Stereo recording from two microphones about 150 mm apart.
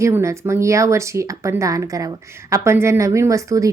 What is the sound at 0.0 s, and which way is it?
A woman's voice, 20° right (ahead or behind).